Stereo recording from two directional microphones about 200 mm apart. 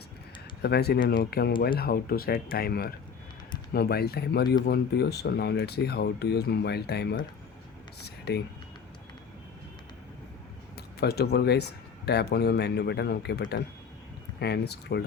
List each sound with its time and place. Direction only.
0.6 s speech: 55° left (ahead or behind)
8.0 s a sound: 55° left (ahead or behind)
10.8 s speech: 55° left (ahead or behind)